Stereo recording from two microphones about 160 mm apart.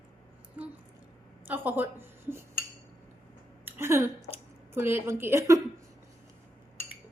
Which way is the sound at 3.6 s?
15° right (ahead or behind).